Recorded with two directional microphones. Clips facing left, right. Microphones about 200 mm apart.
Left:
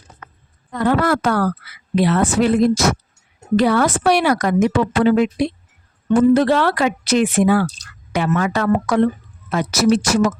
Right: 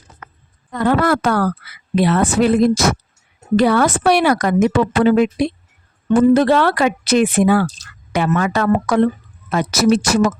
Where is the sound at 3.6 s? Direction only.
60° right (ahead or behind).